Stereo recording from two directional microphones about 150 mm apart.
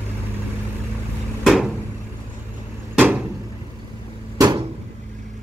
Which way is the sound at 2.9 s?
10° right (ahead or behind).